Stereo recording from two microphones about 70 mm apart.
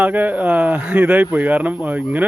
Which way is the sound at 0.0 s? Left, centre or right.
Right.